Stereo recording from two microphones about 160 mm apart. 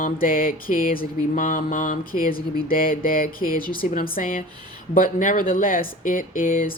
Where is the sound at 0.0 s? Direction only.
60° left (ahead or behind).